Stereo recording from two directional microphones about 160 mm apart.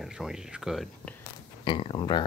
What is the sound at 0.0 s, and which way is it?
Speech, 5° right (ahead or behind).